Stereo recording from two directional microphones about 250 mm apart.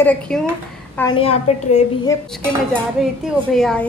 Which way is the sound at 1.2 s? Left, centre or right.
Left.